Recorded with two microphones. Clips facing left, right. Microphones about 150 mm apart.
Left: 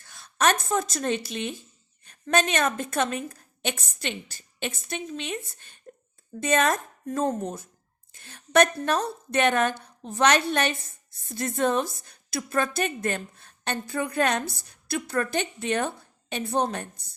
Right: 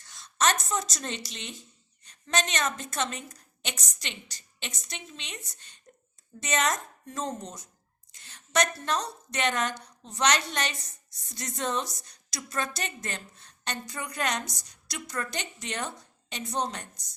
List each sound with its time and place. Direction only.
0.0 s speech: 55° left (ahead or behind)
3.3 s a sound: 55° left (ahead or behind)
4.0 s a woman's voice: 50° left (ahead or behind)
14.4 s a woman's voice: 15° right (ahead or behind)
15.1 s a woman's voice: 55° left (ahead or behind)